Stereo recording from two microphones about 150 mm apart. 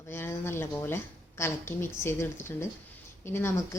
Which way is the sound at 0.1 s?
15° left (ahead or behind).